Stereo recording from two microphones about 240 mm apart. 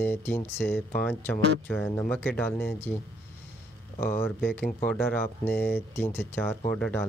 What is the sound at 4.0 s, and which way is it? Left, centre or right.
Speech, centre.